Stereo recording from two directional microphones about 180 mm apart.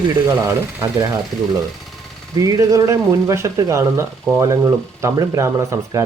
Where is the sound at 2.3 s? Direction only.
20° right (ahead or behind).